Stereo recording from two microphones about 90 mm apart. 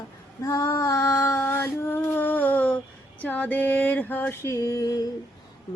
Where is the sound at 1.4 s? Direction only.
25° left (ahead or behind); by 5.0 s 40° left (ahead or behind).